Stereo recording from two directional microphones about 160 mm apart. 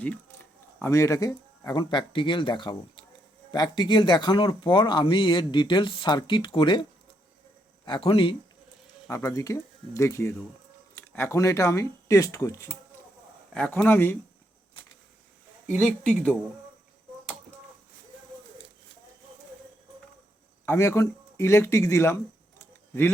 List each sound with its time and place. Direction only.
0.0 s speech: 10° left (ahead or behind); by 6.8 s 30° left (ahead or behind)
7.9 s speech: 35° left (ahead or behind)
9.0 s speech: 20° left (ahead or behind)
13.5 s speech: 5° left (ahead or behind)
15.6 s speech: 10° left (ahead or behind)
20.7 s speech: 15° left (ahead or behind)